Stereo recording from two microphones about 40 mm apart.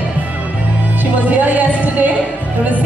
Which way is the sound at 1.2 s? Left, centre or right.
Right.